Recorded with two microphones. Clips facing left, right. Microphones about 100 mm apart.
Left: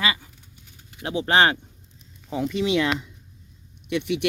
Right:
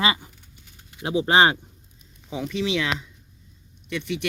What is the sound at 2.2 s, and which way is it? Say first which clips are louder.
Speech: left 3 dB; centre (ahead or behind).